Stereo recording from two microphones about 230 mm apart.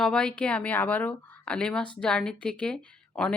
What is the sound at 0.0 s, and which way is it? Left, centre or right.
Speech, centre.